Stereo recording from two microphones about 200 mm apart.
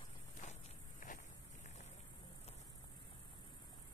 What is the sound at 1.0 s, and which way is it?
Walk, 40° left (ahead or behind).